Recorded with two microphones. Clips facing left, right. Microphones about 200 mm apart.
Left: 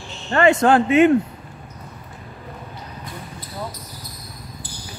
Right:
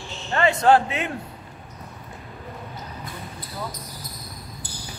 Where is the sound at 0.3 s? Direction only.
60° left (ahead or behind).